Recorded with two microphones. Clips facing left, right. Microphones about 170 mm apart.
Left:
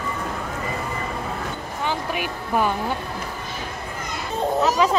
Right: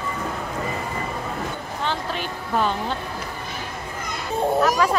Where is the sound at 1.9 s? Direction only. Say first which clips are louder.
Left 2 dB; 10° left (ahead or behind).